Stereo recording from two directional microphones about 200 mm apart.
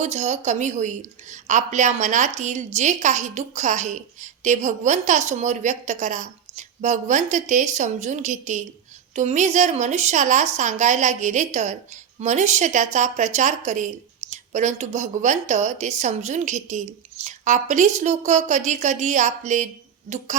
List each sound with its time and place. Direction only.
0.0 s a woman's voice: 35° right (ahead or behind)